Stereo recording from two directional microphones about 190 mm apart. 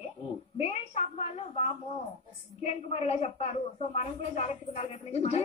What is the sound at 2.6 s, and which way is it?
Speech, 35° left (ahead or behind).